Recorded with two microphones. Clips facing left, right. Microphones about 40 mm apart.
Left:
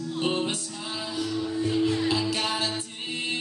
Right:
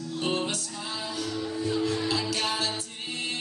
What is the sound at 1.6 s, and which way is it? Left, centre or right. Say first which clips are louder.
Music: left 3 dB; left.